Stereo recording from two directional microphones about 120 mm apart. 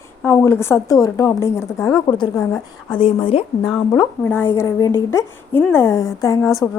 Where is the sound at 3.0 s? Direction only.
50° left (ahead or behind).